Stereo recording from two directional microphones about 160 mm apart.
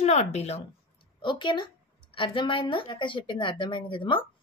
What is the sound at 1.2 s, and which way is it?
Speech, 30° left (ahead or behind).